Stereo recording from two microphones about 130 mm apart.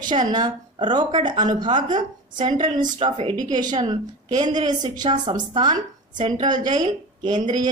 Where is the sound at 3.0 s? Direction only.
45° right (ahead or behind).